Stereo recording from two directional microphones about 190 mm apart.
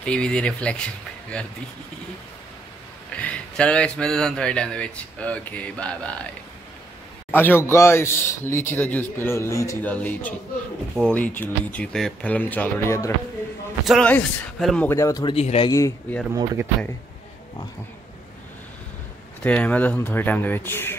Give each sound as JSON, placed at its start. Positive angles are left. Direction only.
{"t": 0.0, "sound": "speech", "side_deg": 5}
{"t": 3.1, "sound": "speech", "side_deg": 5}
{"t": 7.3, "sound": "speech", "side_deg": 10}
{"t": 14.9, "sound": "speech", "side_deg": 15}
{"t": 15.3, "sound": "speech", "side_deg": 30}
{"t": 15.7, "sound": "speech", "side_deg": 15}
{"t": 19.4, "sound": "speech", "side_deg": 5}